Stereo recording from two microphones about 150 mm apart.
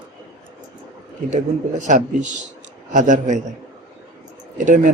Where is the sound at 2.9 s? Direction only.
55° right (ahead or behind).